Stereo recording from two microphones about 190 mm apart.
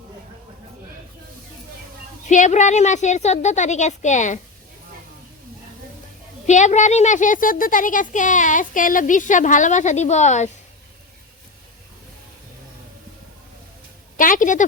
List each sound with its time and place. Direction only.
2.3 s speech: 40° left (ahead or behind)
6.4 s speech: 40° left (ahead or behind)
14.2 s a woman's voice: 45° left (ahead or behind)